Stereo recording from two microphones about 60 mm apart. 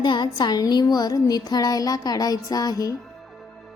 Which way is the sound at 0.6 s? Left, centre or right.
Left.